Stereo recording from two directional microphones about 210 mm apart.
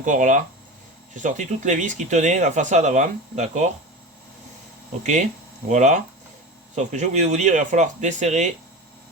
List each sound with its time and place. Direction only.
0.0 s speech: 35° right (ahead or behind)
5.0 s speech: 35° right (ahead or behind)